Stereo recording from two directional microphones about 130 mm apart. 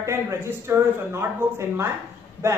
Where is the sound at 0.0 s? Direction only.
20° right (ahead or behind).